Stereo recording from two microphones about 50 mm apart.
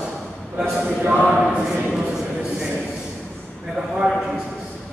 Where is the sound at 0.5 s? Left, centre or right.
Right.